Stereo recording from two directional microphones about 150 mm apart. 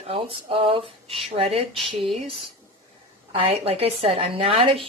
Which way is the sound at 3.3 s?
40° right (ahead or behind).